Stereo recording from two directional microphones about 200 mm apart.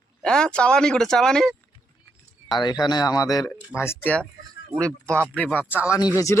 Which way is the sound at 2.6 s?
20° left (ahead or behind).